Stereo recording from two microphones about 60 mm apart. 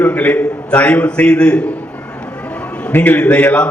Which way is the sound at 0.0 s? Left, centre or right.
Left.